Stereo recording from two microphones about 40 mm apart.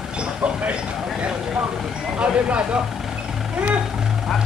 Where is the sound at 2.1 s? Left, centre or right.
Right.